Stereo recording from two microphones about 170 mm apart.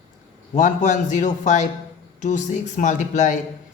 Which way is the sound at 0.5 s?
45° left (ahead or behind).